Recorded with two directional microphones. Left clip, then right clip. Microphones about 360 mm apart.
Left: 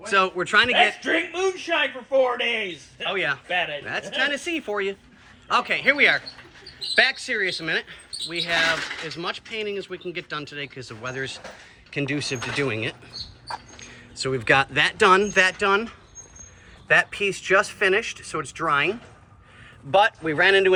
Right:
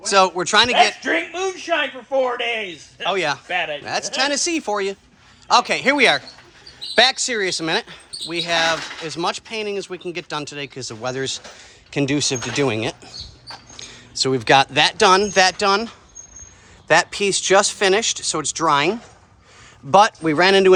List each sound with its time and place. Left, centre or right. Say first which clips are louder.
0.1 s speech: right 4 dB; centre
1.0 s a man's voice: right 2 dB; right
4.4 s speech: right 5 dB; centre
19.9 s a man's voice: right 5 dB; right